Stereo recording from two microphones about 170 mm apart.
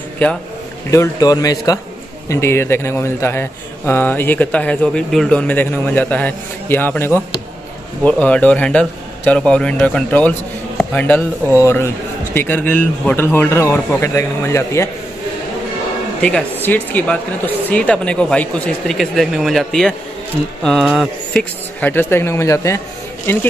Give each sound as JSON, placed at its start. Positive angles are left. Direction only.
{"t": 0.8, "sound": "a man's voice", "side_deg": 15}
{"t": 16.2, "sound": "a man's voice", "side_deg": 5}
{"t": 21.3, "sound": "a man's voice", "side_deg": 10}